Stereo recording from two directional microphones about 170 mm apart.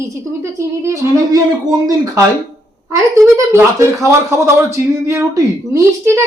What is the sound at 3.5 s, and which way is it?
A child's voice, 15° right (ahead or behind).